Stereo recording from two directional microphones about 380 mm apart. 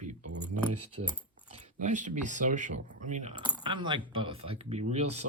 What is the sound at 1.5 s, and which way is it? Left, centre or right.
Speech, centre.